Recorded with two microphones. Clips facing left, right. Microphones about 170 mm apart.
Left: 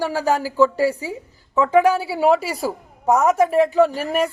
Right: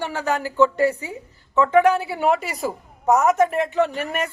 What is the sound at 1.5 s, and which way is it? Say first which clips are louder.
Speech: even; 10° left (ahead or behind).